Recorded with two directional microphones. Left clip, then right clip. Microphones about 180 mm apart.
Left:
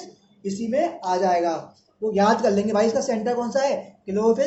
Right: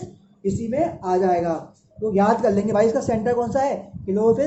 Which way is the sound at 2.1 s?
55° right (ahead or behind).